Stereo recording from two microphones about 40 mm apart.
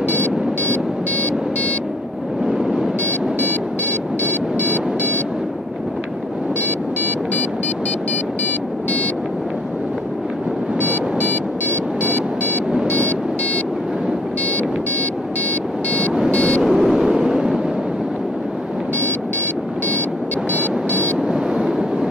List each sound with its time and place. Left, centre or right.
0.1 s music: left
2.4 s a sound: centre
4.2 s music: left
10.8 s music: left
16.3 s vehicle: left
16.8 s vehicle: centre
20.5 s music: left